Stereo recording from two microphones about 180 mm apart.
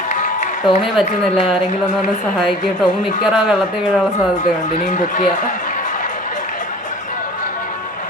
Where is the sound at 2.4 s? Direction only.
Centre (ahead or behind).